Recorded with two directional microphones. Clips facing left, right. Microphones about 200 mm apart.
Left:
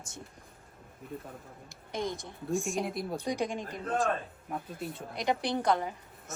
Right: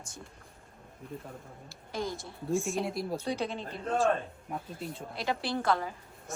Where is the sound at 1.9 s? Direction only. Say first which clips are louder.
Left 1 dB; 20° left (ahead or behind).